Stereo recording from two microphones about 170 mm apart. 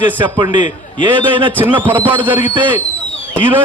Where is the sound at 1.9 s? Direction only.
30° right (ahead or behind).